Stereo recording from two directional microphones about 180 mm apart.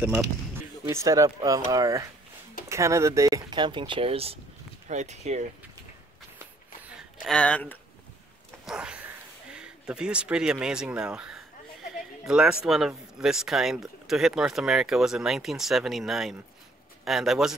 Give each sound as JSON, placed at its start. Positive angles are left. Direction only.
{"t": 0.0, "sound": "speech", "side_deg": -10}
{"t": 7.2, "sound": "speech", "side_deg": 5}
{"t": 8.6, "sound": "a sound", "side_deg": -5}
{"t": 12.3, "sound": "speech", "side_deg": -5}